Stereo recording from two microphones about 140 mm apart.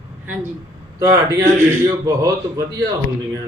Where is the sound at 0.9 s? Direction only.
25° right (ahead or behind).